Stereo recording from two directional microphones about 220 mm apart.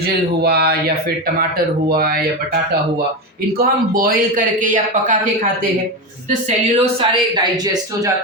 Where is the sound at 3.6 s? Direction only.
40° right (ahead or behind).